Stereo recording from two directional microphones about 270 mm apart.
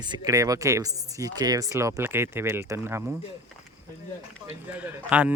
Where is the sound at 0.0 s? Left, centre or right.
Centre.